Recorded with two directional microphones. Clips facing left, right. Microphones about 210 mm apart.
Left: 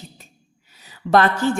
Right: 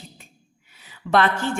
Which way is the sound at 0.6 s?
40° left (ahead or behind).